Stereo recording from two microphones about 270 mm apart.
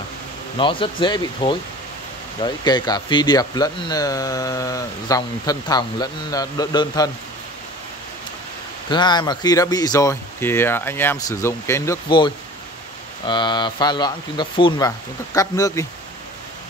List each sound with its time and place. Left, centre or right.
0.6 s speech: centre
8.9 s speech: centre
13.3 s speech: centre